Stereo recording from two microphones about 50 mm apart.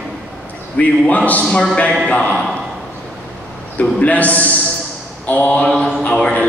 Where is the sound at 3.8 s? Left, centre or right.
Left.